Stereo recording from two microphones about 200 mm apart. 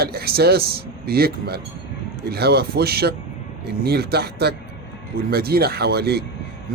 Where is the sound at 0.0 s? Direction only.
50° right (ahead or behind).